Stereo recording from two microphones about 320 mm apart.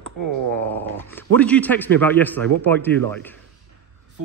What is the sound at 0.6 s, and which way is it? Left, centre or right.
Speech, right.